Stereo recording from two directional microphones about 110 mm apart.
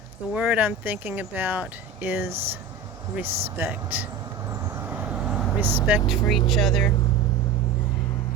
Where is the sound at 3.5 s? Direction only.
20° right (ahead or behind).